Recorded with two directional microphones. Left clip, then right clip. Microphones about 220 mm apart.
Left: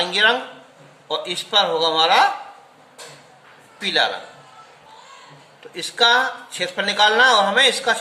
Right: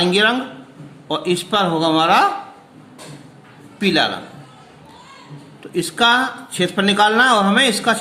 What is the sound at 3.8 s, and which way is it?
Speech, 20° right (ahead or behind).